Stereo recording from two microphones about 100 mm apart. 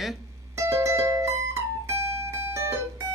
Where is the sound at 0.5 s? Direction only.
30° right (ahead or behind).